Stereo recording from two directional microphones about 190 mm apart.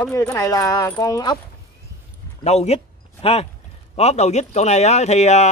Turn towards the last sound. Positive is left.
turn(degrees=35)  # may be behind; listen again after turning